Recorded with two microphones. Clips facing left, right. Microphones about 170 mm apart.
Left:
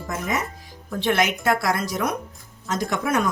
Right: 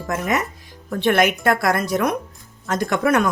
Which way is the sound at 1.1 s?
55° right (ahead or behind).